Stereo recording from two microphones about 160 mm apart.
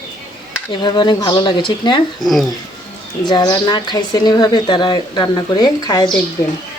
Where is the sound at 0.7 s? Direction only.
30° left (ahead or behind).